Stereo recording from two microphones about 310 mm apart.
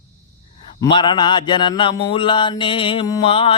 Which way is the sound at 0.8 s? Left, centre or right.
Centre.